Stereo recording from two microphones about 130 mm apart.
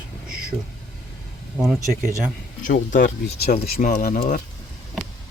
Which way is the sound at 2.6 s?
90° left.